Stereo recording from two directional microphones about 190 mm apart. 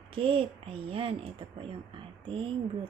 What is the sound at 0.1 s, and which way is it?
A woman's voice, 30° right (ahead or behind).